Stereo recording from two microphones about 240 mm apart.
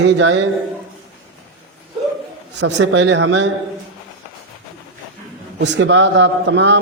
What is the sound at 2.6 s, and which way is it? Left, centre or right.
Speech, right.